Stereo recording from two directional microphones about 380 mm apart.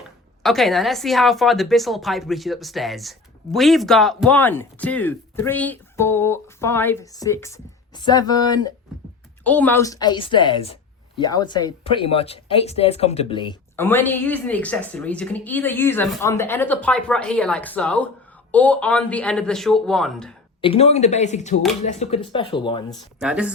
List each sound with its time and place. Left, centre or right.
0.4 s a woman's voice: centre
20.6 s a woman's voice: centre
23.2 s a woman's voice: centre